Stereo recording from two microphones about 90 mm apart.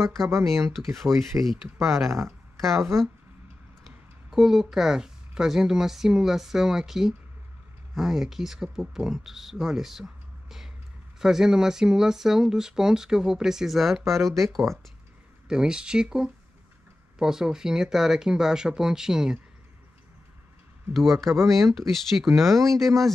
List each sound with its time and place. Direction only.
0.2 s speech: 5° left (ahead or behind)
0.8 s speech: 35° right (ahead or behind)
1.4 s speech: centre (ahead or behind)
2.0 s speech: 30° right (ahead or behind)
4.3 s speech: 5° right (ahead or behind)
20.9 s speech: centre (ahead or behind)